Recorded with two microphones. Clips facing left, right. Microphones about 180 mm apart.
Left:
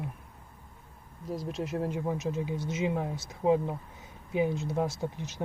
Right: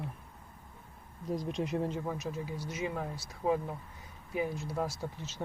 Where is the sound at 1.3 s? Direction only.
Centre (ahead or behind).